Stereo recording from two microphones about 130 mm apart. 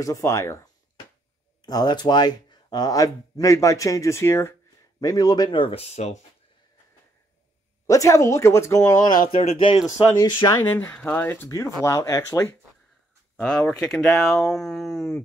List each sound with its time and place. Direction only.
0.0 s speech: 25° left (ahead or behind)
1.7 s speech: 30° left (ahead or behind); by 6.2 s 60° left (ahead or behind)
7.8 s speech: 25° left (ahead or behind)
9.4 s speech: 45° left (ahead or behind)
9.8 s speech: 25° left (ahead or behind)
10.5 s speech: 15° left (ahead or behind)
11.4 s speech: 25° left (ahead or behind)
13.4 s speech: 5° left (ahead or behind)